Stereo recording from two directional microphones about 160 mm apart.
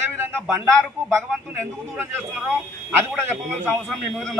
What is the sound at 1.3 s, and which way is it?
A man's voice, 10° right (ahead or behind).